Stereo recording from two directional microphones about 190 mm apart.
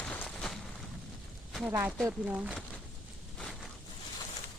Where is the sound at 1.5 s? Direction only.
5° right (ahead or behind).